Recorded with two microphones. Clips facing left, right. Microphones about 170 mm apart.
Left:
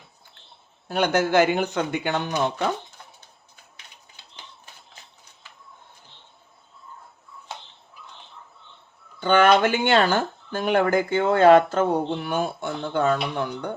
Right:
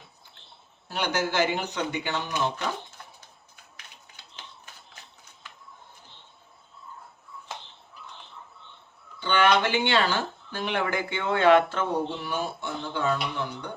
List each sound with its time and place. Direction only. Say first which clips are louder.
0.9 s speech: left 7 dB; 55° left (ahead or behind)
9.2 s speech: left 5 dB; 45° left (ahead or behind)